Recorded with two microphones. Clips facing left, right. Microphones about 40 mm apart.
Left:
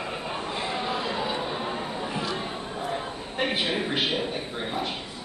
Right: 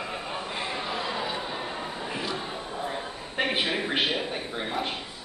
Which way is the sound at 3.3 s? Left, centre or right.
Centre.